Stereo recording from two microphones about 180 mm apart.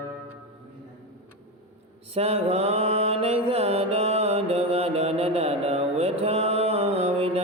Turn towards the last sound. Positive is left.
turn(degrees=-35)  # may be behind; listen again after turning